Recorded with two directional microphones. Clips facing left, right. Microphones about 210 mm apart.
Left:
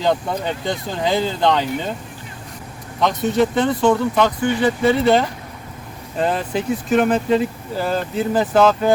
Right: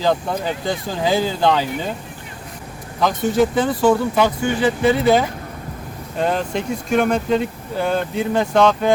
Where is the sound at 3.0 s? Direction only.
5° right (ahead or behind).